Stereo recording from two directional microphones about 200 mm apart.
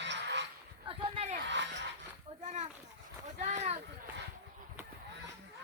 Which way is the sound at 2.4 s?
35° right (ahead or behind).